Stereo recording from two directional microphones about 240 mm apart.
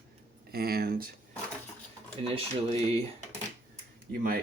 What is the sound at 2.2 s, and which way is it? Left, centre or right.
Speech, right.